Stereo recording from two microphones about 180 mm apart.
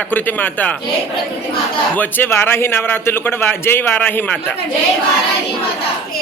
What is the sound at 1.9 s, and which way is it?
A man's voice, 10° left (ahead or behind).